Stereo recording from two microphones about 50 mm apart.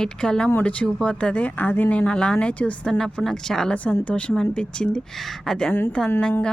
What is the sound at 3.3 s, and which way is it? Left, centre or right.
Speech, centre.